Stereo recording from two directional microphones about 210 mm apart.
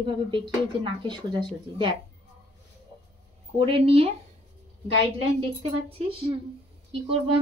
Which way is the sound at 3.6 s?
25° right (ahead or behind).